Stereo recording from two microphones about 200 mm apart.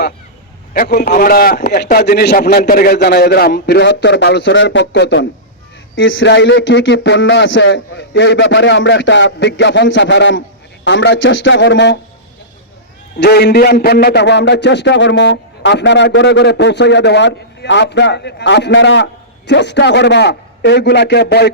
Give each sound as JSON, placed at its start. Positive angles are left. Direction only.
{"t": 0.7, "sound": "a man's voice", "side_deg": 50}
{"t": 13.1, "sound": "a man's voice", "side_deg": 55}